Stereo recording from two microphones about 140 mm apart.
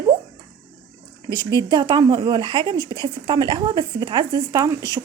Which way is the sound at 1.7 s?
30° right (ahead or behind).